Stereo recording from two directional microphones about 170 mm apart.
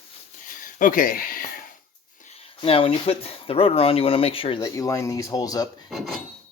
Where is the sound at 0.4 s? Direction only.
50° left (ahead or behind).